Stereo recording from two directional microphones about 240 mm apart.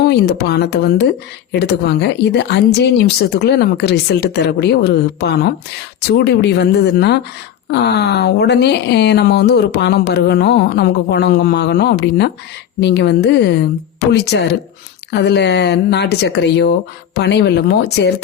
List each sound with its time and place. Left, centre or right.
0.0 s speech: left